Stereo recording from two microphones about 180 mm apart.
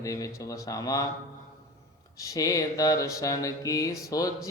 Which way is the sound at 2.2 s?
20° left (ahead or behind).